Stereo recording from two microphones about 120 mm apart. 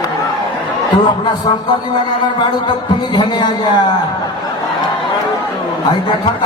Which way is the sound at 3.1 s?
40° left (ahead or behind).